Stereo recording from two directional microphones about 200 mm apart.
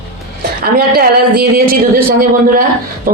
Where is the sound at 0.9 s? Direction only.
50° right (ahead or behind).